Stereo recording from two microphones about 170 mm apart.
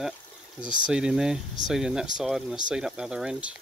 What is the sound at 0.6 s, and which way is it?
Speech, 5° right (ahead or behind).